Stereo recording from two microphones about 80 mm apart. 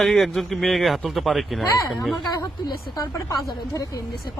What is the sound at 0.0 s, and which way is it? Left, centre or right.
Speech, centre.